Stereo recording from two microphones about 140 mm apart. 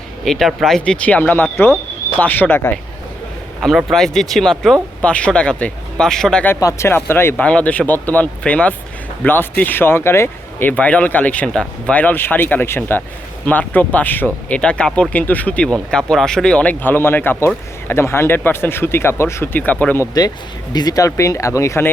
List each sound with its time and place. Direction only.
0.3 s speech: centre (ahead or behind)
3.6 s speech: centre (ahead or behind)
6.5 s speech: 20° left (ahead or behind)
20.7 s speech: 25° left (ahead or behind)